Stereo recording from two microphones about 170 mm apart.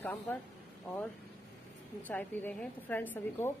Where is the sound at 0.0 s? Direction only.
10° left (ahead or behind).